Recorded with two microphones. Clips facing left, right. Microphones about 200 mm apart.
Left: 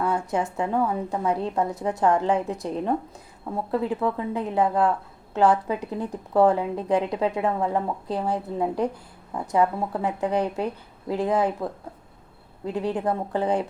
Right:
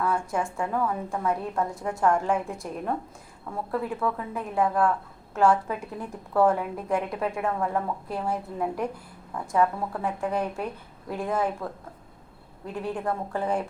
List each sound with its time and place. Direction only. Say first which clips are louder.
0.0 s speech: left 2 dB; 20° left (ahead or behind)
12.7 s speech: left 4 dB; 20° left (ahead or behind)